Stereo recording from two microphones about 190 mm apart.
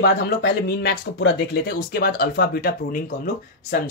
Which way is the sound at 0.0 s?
55° left (ahead or behind).